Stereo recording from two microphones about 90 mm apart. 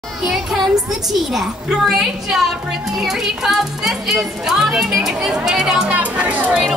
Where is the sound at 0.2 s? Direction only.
5° right (ahead or behind).